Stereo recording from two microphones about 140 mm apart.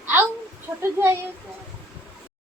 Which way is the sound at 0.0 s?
15° right (ahead or behind).